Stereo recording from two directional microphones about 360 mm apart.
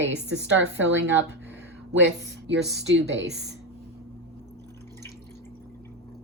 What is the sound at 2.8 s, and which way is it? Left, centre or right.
Speech, right.